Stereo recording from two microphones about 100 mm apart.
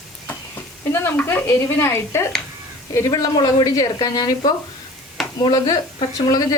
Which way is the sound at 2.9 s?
35° left (ahead or behind).